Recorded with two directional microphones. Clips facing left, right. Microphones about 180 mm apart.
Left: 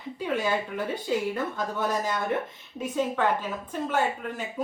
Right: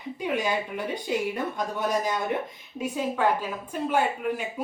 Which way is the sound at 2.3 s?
15° right (ahead or behind).